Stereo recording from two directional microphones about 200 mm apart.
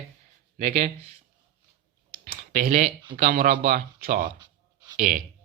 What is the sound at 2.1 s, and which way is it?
Computer keyboard, 45° right (ahead or behind).